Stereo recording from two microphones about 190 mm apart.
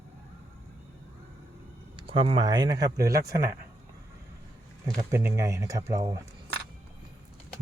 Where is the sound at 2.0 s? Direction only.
25° right (ahead or behind).